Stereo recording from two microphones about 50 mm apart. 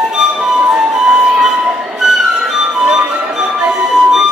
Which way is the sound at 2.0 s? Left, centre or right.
Centre.